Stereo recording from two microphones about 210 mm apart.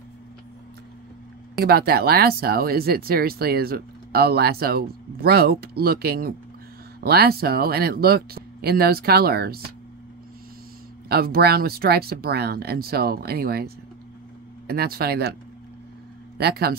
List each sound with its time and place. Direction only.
1.6 s speech: 50° right (ahead or behind)
11.1 s speech: 45° right (ahead or behind)
14.7 s speech: 45° right (ahead or behind)
16.3 s speech: 50° right (ahead or behind)